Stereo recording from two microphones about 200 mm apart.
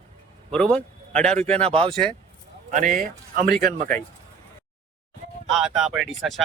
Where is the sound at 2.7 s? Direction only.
40° right (ahead or behind).